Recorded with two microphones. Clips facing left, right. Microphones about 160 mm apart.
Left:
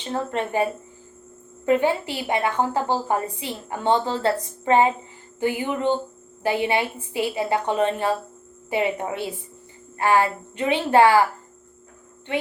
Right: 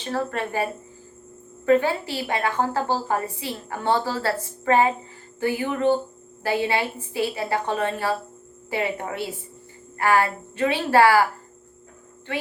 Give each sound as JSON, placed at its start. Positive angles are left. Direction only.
{"t": 0.0, "sound": "a woman's voice", "side_deg": 20}
{"t": 12.3, "sound": "speech", "side_deg": 20}